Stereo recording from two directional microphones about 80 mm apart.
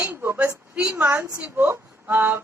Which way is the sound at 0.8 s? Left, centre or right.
Centre.